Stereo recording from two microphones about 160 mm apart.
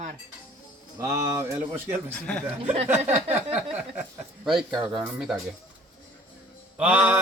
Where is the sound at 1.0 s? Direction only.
20° right (ahead or behind).